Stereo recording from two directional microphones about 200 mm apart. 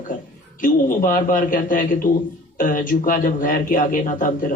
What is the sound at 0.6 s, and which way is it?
A man's voice, 40° left (ahead or behind).